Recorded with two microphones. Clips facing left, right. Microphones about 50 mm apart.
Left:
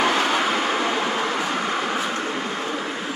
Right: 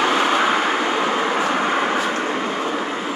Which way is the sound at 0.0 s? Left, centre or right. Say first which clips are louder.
Right 3 dB; centre.